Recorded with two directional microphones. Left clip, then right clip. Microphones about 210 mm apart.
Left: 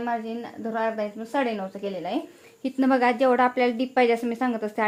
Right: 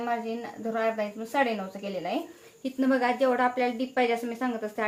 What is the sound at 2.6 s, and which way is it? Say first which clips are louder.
A woman's voice: left 4 dB; 50° left (ahead or behind).